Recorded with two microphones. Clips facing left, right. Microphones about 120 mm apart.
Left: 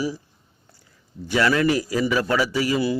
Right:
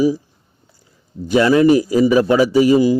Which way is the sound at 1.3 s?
20° right (ahead or behind).